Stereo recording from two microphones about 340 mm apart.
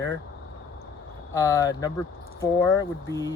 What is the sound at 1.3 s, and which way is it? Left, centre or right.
Speech, centre.